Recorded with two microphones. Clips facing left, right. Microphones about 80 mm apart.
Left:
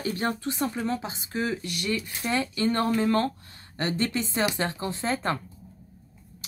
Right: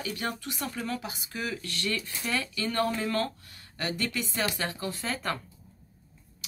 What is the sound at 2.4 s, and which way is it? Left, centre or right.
Speech, left.